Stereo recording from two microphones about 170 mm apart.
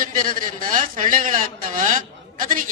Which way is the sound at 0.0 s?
55° right (ahead or behind).